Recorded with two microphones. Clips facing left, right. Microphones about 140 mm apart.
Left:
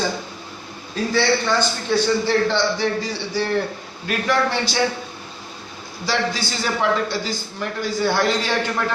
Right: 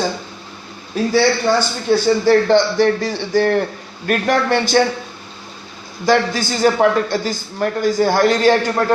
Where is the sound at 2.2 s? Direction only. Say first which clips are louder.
Right 7 dB; 50° right (ahead or behind).